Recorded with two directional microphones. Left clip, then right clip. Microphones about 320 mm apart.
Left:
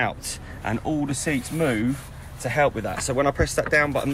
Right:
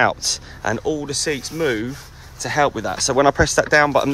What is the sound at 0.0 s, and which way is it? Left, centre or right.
Speech, centre.